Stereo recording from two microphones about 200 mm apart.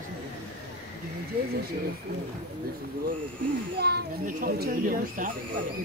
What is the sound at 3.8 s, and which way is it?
A child's voice, 50° right (ahead or behind).